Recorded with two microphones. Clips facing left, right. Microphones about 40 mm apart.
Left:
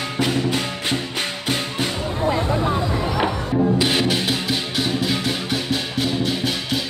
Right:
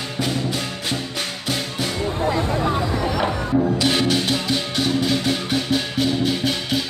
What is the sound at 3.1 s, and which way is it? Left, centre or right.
Music, centre.